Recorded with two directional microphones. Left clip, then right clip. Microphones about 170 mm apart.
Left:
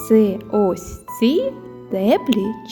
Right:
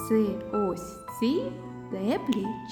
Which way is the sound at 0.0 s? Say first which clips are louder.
Left 11 dB; 45° left (ahead or behind).